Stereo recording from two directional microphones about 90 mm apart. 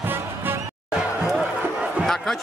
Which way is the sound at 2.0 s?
5° left (ahead or behind).